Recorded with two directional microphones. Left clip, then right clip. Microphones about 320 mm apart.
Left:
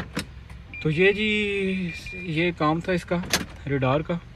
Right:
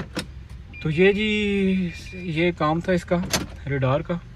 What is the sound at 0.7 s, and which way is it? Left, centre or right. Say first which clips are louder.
Speech: right 1 dB; centre.